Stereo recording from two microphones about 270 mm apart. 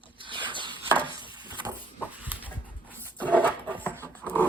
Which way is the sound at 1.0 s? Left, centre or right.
Centre.